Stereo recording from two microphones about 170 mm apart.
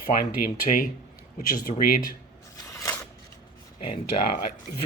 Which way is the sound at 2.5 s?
20° left (ahead or behind).